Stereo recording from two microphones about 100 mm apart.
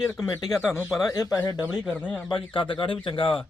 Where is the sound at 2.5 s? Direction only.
60° left (ahead or behind).